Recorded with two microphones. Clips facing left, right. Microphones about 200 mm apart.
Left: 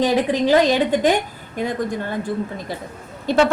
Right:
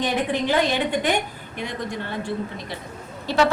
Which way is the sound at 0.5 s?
40° left (ahead or behind).